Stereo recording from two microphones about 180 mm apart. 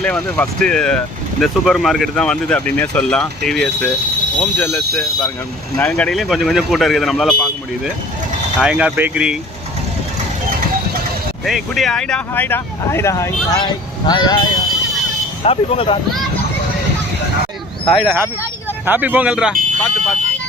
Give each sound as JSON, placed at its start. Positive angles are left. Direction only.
{"t": 0.0, "sound": "speech", "side_deg": 5}
{"t": 8.5, "sound": "speech", "side_deg": -5}
{"t": 11.4, "sound": "speech", "side_deg": 0}
{"t": 15.4, "sound": "speech", "side_deg": 30}
{"t": 17.8, "sound": "speech", "side_deg": 0}